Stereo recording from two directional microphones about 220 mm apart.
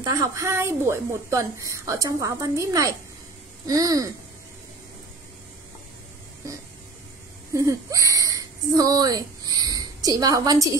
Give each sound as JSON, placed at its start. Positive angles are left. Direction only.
{"t": 0.0, "sound": "a woman's voice", "side_deg": -15}
{"t": 6.4, "sound": "a woman's voice", "side_deg": -15}